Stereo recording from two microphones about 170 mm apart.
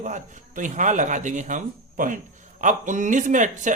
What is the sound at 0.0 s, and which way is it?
A man's voice, 45° right (ahead or behind).